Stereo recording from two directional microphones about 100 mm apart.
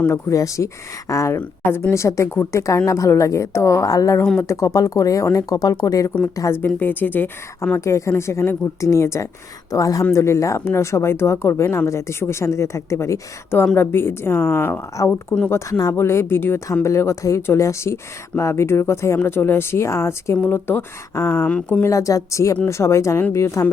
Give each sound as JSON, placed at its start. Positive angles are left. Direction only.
{"t": 0.0, "sound": "speech", "side_deg": 30}
{"t": 1.4, "sound": "speech", "side_deg": 20}
{"t": 6.7, "sound": "speech", "side_deg": 20}
{"t": 21.4, "sound": "speech", "side_deg": 15}
{"t": 21.8, "sound": "speech", "side_deg": 35}